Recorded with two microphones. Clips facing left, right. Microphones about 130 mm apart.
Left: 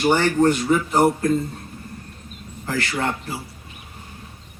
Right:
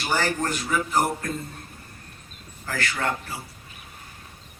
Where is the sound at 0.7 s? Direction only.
25° left (ahead or behind).